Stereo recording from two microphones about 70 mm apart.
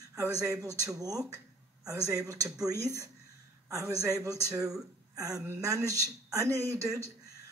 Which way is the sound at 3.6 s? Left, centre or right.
Right.